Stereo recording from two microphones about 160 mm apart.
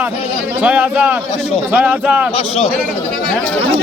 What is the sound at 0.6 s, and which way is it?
A man's voice, 10° right (ahead or behind).